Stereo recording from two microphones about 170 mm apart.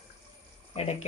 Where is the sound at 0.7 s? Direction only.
40° left (ahead or behind).